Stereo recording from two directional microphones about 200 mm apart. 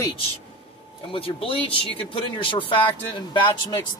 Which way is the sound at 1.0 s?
25° left (ahead or behind).